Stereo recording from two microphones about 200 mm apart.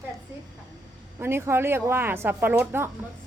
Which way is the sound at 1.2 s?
10° right (ahead or behind).